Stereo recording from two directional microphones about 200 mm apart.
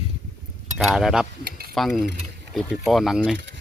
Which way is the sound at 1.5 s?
50° right (ahead or behind).